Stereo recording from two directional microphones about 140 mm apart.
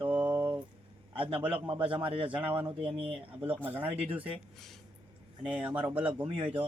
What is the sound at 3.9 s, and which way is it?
Speech, 40° right (ahead or behind).